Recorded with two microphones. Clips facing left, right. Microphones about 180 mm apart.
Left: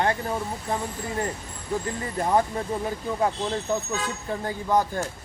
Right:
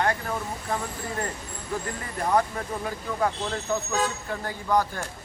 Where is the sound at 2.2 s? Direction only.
25° left (ahead or behind).